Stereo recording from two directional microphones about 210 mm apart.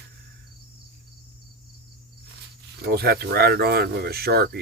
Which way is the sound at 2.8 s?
50° right (ahead or behind).